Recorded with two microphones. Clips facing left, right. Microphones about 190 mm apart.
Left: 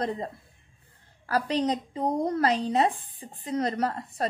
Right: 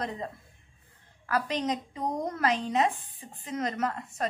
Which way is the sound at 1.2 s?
35° left (ahead or behind).